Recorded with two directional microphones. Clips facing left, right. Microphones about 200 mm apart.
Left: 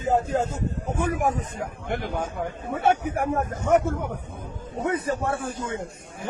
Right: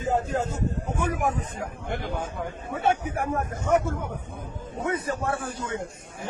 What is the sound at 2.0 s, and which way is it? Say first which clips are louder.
A man's voice: left 3 dB; 50° left (ahead or behind).